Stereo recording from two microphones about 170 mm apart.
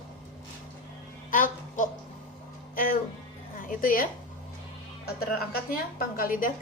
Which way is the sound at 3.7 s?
55° left (ahead or behind).